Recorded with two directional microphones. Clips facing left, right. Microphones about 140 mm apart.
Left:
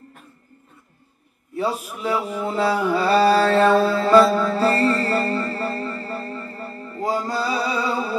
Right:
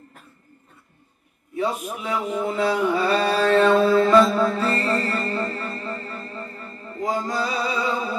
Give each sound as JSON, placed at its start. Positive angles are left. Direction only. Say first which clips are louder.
{"t": 2.0, "sound": "mantra", "louder": "left 2 dB", "side_deg": 35}
{"t": 5.5, "sound": "music", "louder": "left 4 dB", "side_deg": 35}